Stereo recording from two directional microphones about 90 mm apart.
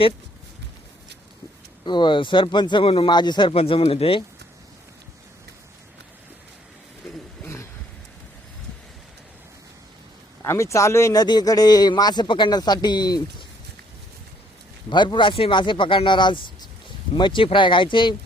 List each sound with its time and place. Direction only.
1.8 s speech: 60° left (ahead or behind); by 3.1 s 90° left
3.1 s speech: 55° left (ahead or behind); by 4.2 s 90° left
7.4 s a sound: 30° left (ahead or behind)
10.4 s speech: 30° left (ahead or behind)
11.2 s speech: 50° left (ahead or behind)
14.8 s speech: 60° left (ahead or behind)